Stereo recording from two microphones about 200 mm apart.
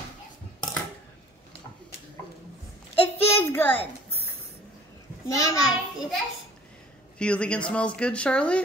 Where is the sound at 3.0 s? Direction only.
10° left (ahead or behind).